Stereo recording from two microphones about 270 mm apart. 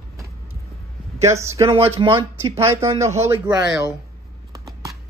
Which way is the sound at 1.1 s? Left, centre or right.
Centre.